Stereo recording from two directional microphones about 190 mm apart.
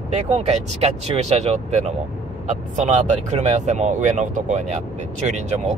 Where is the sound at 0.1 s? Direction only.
35° right (ahead or behind).